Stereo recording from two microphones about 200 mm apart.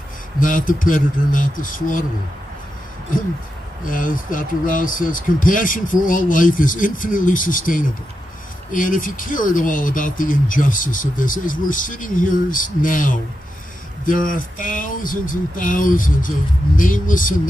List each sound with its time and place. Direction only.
0.4 s speech: 40° left (ahead or behind)
3.8 s speech: 45° left (ahead or behind)